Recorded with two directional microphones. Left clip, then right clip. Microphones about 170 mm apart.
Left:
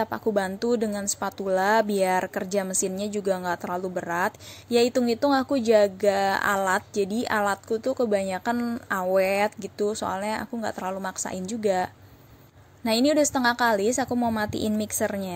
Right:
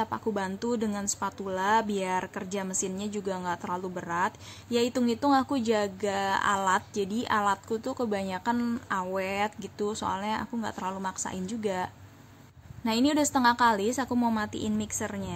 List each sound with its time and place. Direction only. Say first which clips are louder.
0.0 s a woman's voice: left 5 dB; 20° left (ahead or behind)